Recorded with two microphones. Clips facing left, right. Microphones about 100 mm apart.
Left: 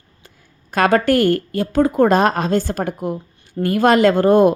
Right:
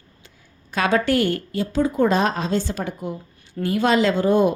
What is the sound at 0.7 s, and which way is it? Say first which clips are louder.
A woman's voice: left 5 dB; 50° left (ahead or behind).